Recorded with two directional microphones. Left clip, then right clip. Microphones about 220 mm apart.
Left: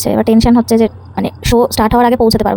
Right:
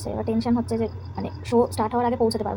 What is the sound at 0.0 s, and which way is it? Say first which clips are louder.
Speech: left 15 dB; 50° left (ahead or behind).